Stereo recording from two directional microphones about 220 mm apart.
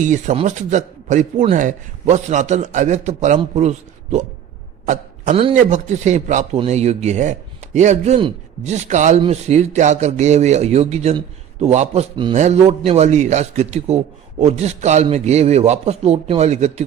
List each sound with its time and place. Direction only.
0.0 s speech: 35° right (ahead or behind)
5.3 s a man's voice: 25° right (ahead or behind)